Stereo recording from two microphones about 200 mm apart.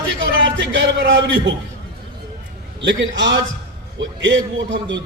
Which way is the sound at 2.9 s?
65° right (ahead or behind).